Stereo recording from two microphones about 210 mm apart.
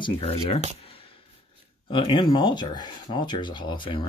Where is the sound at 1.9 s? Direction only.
20° left (ahead or behind).